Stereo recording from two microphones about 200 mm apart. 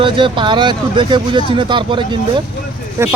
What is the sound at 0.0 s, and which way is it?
Speech, 25° right (ahead or behind).